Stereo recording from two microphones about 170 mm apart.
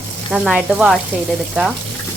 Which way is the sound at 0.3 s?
5° right (ahead or behind).